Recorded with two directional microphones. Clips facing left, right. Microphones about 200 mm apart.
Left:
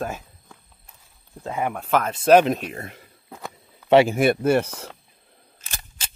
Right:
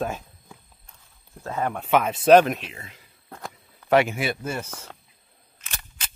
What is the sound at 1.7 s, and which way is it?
Speech, centre (ahead or behind).